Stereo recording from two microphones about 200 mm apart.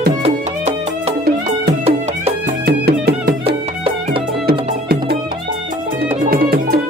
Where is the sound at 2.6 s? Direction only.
50° right (ahead or behind).